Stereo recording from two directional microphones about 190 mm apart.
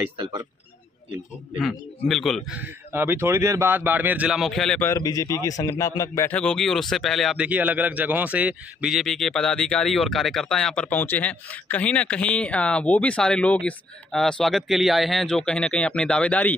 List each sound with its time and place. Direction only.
1.5 s speech: centre (ahead or behind)
2.6 s speech: 10° right (ahead or behind); by 16.5 s 5° left (ahead or behind)